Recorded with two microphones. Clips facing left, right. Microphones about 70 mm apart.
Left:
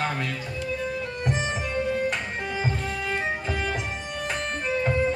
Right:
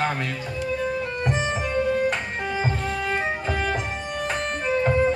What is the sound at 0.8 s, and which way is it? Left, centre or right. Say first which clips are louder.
Music: right 3 dB; right.